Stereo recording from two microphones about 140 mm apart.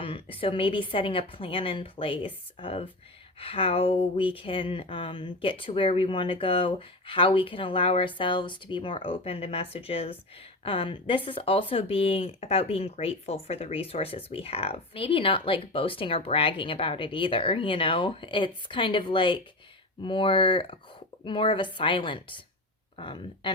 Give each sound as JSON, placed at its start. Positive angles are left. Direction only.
{"t": 0.0, "sound": "speech", "side_deg": 40}